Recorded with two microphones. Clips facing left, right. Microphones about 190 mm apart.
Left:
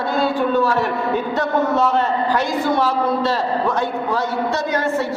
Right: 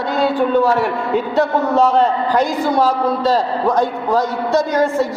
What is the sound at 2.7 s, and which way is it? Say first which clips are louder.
A man's voice: right 2 dB; 40° right (ahead or behind).